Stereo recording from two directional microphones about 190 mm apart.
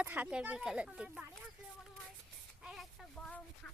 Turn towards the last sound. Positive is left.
turn(degrees=5)  # may be behind; listen again after turning